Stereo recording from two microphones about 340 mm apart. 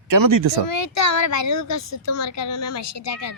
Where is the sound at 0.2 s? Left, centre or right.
Right.